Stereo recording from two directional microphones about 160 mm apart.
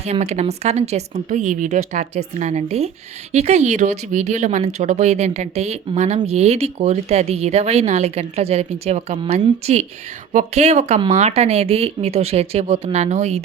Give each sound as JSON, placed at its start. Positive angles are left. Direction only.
{"t": 0.0, "sound": "speech", "side_deg": -45}
{"t": 10.3, "sound": "speech", "side_deg": -45}